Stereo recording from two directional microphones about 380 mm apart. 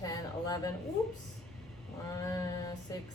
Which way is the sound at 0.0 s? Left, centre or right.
Centre.